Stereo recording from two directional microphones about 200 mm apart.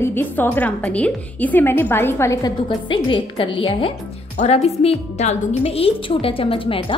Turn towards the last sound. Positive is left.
turn(degrees=25)  # may be behind; listen again after turning